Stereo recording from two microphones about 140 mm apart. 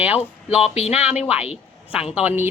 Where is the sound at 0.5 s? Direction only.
50° left (ahead or behind).